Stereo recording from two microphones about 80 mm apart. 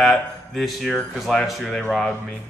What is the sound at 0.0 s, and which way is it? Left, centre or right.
Speech, centre.